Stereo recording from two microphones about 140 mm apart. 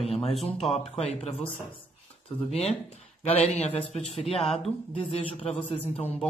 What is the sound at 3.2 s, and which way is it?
Speech, 50° left (ahead or behind).